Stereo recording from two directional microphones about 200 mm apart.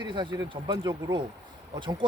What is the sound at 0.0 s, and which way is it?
Speech, 20° right (ahead or behind).